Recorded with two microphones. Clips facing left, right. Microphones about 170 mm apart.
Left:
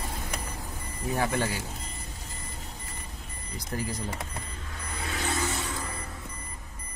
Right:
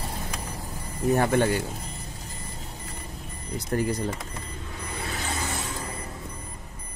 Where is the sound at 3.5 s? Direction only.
60° right (ahead or behind).